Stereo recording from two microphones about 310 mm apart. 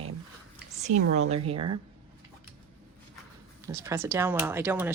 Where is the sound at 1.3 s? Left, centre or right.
Centre.